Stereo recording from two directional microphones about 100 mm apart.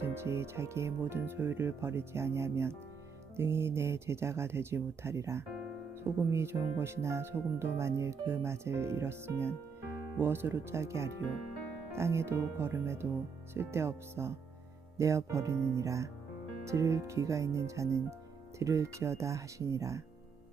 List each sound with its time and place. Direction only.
0.0 s speech: 25° right (ahead or behind)